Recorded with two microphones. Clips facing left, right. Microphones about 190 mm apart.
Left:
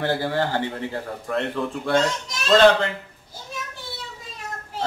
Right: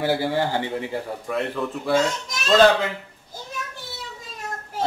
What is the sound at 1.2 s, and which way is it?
Speech, 5° right (ahead or behind).